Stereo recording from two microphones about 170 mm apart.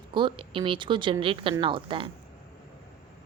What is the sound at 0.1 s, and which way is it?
Speech, 30° right (ahead or behind).